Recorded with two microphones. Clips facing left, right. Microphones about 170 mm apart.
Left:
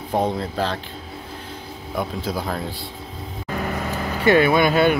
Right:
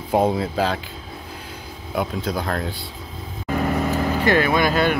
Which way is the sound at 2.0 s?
5° left (ahead or behind).